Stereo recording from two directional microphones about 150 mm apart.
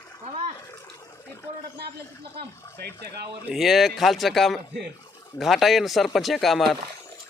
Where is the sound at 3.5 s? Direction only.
Centre (ahead or behind).